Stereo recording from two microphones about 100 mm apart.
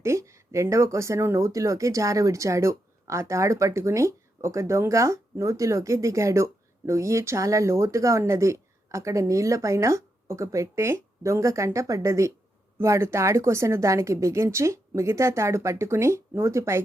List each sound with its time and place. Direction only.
0.0 s a woman's voice: 30° right (ahead or behind)